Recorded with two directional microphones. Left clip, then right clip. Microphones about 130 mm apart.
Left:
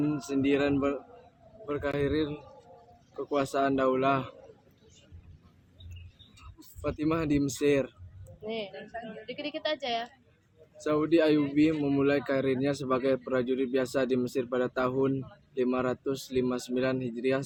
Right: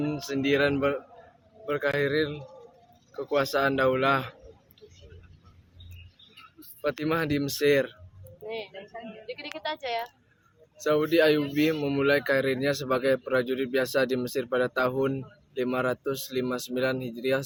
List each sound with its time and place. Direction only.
0.0 s speech: 5° left (ahead or behind)
6.8 s speech: 5° left (ahead or behind)
8.4 s a woman's voice: 25° left (ahead or behind)
10.8 s speech: centre (ahead or behind)